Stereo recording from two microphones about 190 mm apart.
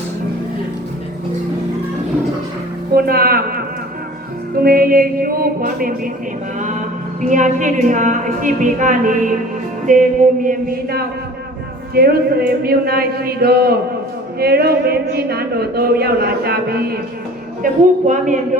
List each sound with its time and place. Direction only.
2.9 s speech: 55° right (ahead or behind)
4.6 s a sound: 50° right (ahead or behind)
6.6 s a woman's voice: 40° right (ahead or behind)
9.8 s a sound: 45° right (ahead or behind)
14.3 s speech: 55° right (ahead or behind)
17.6 s a woman's voice: 40° right (ahead or behind)